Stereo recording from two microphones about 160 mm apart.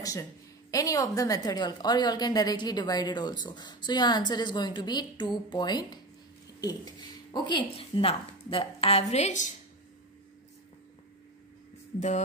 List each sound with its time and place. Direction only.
0.0 s a woman's voice: 20° left (ahead or behind); by 9.5 s 50° left (ahead or behind)